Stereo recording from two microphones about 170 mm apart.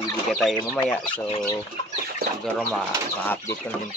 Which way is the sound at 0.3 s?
Centre (ahead or behind).